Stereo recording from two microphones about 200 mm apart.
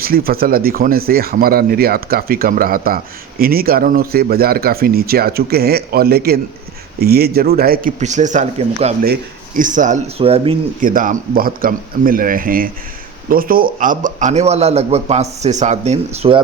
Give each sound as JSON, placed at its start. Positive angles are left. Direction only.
{"t": 0.0, "sound": "a man's voice", "side_deg": -50}
{"t": 10.8, "sound": "a man's voice", "side_deg": -40}